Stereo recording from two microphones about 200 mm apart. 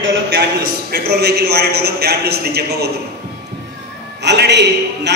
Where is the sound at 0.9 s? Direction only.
55° right (ahead or behind).